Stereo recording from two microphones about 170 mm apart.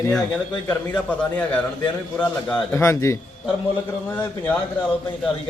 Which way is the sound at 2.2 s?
10° left (ahead or behind).